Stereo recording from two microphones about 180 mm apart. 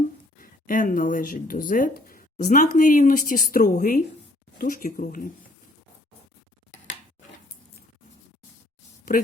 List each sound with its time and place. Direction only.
0.3 s a woman's voice: 50° left (ahead or behind)
9.1 s speech: 50° left (ahead or behind)